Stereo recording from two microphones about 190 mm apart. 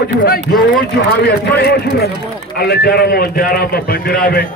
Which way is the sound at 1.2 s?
60° left (ahead or behind).